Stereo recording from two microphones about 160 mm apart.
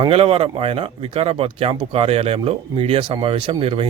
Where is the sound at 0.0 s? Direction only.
35° right (ahead or behind).